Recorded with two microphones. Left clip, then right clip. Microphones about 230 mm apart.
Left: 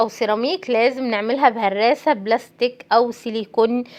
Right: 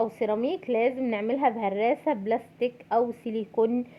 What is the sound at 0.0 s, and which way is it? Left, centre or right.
A woman's voice, centre.